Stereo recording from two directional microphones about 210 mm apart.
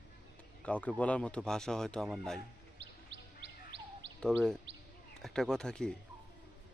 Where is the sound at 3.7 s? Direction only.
55° right (ahead or behind).